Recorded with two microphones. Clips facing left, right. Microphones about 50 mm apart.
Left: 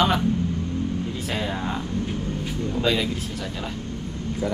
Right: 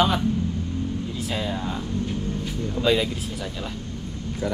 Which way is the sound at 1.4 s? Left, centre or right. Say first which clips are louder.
Left 1 dB; left.